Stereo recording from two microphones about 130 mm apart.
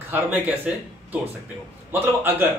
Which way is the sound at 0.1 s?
15° right (ahead or behind).